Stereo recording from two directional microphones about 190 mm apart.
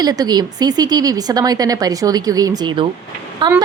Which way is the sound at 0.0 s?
20° right (ahead or behind).